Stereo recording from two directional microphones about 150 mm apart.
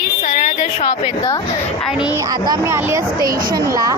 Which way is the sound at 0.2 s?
55° left (ahead or behind).